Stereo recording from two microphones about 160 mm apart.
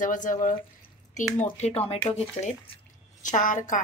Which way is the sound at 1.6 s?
40° left (ahead or behind).